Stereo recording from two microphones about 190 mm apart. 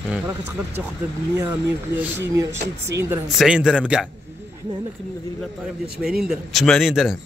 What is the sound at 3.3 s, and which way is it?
Speech, 5° right (ahead or behind).